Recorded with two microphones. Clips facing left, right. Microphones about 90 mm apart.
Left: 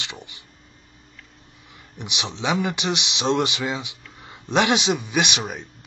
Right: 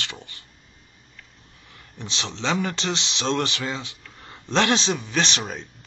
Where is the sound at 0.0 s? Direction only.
15° left (ahead or behind).